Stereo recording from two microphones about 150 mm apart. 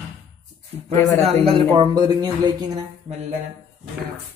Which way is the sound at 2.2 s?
30° right (ahead or behind).